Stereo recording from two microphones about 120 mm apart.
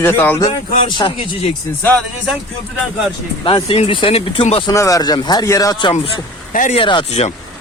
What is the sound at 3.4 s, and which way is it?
Speech, 50° left (ahead or behind).